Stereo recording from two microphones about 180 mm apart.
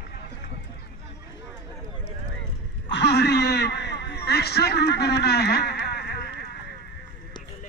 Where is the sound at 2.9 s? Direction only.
65° left (ahead or behind).